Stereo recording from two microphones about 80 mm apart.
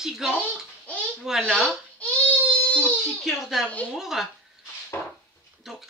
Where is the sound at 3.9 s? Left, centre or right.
Centre.